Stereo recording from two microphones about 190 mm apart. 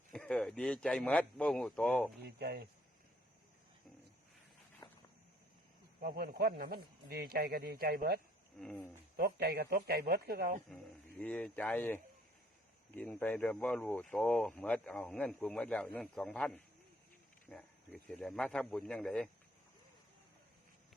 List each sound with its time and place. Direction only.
0.1 s speech: 5° left (ahead or behind)
2.2 s a man's voice: 55° right (ahead or behind)
6.0 s speech: 50° right (ahead or behind)
8.6 s speech: 10° left (ahead or behind)
9.1 s a man's voice: 55° right (ahead or behind)
11.2 s speech: 5° left (ahead or behind)